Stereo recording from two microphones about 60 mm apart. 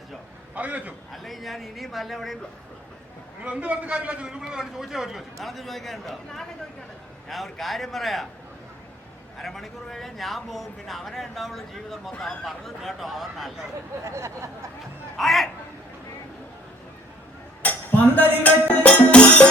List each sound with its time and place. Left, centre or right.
0.5 s a man's voice: right
1.1 s a man's voice: centre
3.4 s a man's voice: right; by 8.3 s centre
9.4 s a man's voice: centre
14.0 s a sound: right
15.2 s a man's voice: centre
17.6 s cutlery: left
18.4 s music: left